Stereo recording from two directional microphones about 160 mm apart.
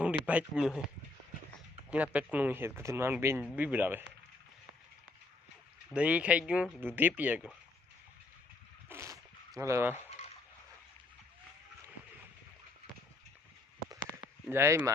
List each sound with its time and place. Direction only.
0.0 s speech: 10° right (ahead or behind)
1.9 s speech: 10° right (ahead or behind)
5.9 s speech: 10° right (ahead or behind)
8.9 s zipper: 20° right (ahead or behind)
14.5 s speech: 15° right (ahead or behind)